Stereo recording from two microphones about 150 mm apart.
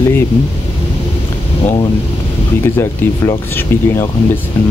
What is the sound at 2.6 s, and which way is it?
Speech, 15° left (ahead or behind).